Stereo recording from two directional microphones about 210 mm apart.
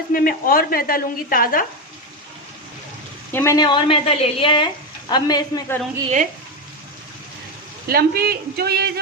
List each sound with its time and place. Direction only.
0.1 s a woman's voice: 45° left (ahead or behind)
3.3 s speech: 15° left (ahead or behind)
7.9 s speech: 45° right (ahead or behind)